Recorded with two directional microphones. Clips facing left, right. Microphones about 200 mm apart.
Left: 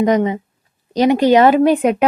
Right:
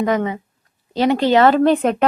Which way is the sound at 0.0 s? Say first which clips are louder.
Left 4 dB; 20° left (ahead or behind).